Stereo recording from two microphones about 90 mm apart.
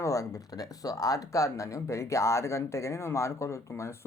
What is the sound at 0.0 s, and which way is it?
Speech, 35° left (ahead or behind).